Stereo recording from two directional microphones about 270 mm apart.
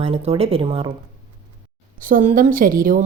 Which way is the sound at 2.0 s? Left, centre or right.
Right.